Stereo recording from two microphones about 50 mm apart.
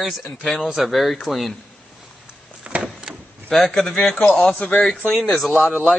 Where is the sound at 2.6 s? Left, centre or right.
Right.